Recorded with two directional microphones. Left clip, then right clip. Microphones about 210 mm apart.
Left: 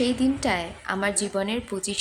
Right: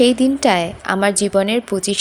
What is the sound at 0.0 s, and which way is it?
A woman's voice, 35° right (ahead or behind).